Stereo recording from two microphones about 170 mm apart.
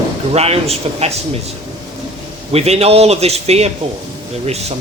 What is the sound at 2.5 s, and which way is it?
Speech, 40° right (ahead or behind).